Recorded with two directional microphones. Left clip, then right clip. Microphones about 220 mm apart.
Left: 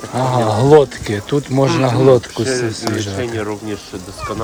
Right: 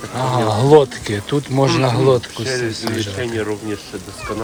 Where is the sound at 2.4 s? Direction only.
35° left (ahead or behind).